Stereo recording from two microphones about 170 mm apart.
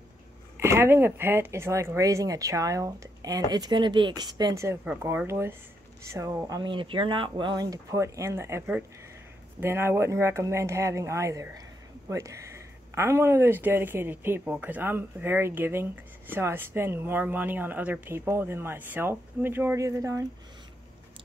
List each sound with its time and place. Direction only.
0.6 s speech: 15° right (ahead or behind)